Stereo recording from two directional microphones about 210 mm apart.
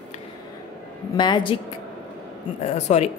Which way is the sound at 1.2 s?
20° left (ahead or behind).